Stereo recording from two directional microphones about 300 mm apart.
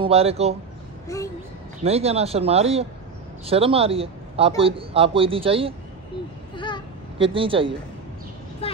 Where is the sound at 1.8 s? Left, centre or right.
Centre.